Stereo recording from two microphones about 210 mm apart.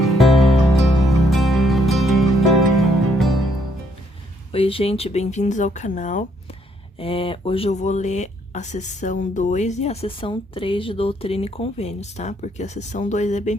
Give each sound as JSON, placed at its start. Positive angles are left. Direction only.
{"t": 0.0, "sound": "music", "side_deg": 0}
{"t": 4.5, "sound": "speech", "side_deg": 25}
{"t": 7.0, "sound": "speech", "side_deg": 25}